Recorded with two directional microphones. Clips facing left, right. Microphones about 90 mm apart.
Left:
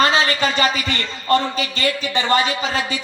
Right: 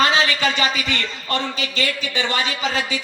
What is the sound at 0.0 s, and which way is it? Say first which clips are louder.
A man's voice: left 1 dB; 40° left (ahead or behind).